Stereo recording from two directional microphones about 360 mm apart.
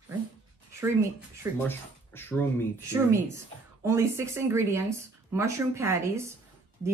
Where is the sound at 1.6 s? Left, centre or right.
Centre.